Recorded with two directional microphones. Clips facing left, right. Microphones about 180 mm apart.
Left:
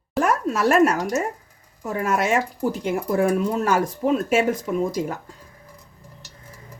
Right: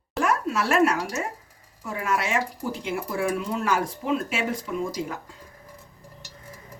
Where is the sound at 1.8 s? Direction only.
40° left (ahead or behind).